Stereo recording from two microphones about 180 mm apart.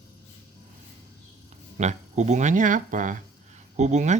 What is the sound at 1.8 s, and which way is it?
Speech, 40° right (ahead or behind).